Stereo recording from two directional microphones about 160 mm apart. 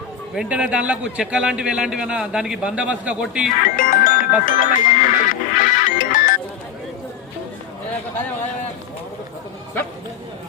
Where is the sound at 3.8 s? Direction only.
55° left (ahead or behind).